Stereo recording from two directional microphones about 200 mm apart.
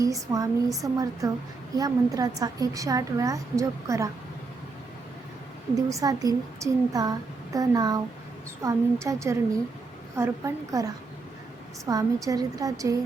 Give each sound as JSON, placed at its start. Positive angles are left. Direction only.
{"t": 0.0, "sound": "a woman's voice", "side_deg": -15}
{"t": 5.7, "sound": "a woman's voice", "side_deg": -15}